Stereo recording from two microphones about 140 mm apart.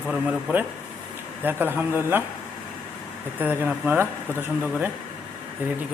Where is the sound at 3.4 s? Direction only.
10° right (ahead or behind).